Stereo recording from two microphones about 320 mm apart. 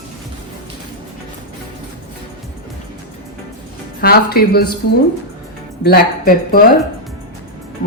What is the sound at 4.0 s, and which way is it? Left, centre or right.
Speech, left.